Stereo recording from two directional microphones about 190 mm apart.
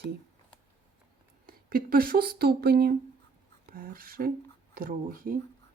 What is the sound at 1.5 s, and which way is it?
Speech, 50° right (ahead or behind).